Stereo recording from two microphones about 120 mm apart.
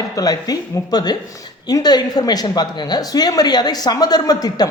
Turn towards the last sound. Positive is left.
turn(degrees=35)  # may be behind; listen again after turning